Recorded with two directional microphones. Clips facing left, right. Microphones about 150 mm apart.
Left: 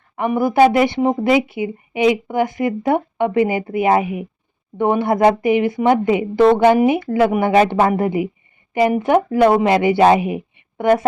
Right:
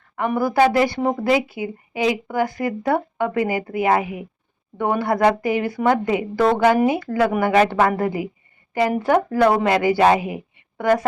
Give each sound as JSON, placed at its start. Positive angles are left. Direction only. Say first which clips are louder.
{"t": 0.2, "sound": "speech", "louder": "left 4 dB", "side_deg": 20}